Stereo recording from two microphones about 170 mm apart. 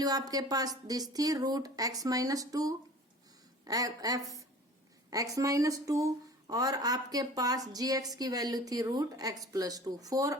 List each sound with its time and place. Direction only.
0.0 s a woman's voice: 20° right (ahead or behind)